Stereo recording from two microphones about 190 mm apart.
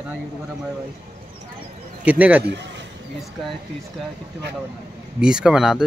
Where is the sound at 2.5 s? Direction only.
65° right (ahead or behind).